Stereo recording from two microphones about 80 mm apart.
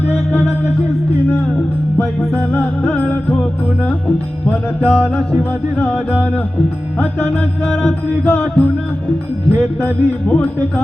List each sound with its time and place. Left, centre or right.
2.8 s music: left
4.4 s music: centre
7.0 s music: left